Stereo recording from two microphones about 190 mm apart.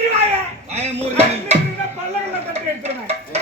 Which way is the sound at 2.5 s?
35° right (ahead or behind).